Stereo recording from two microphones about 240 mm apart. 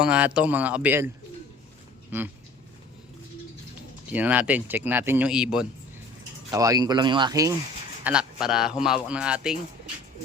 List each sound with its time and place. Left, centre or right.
0.0 s speech: centre
4.1 s speech: centre
6.5 s speech: centre
8.0 s speech: centre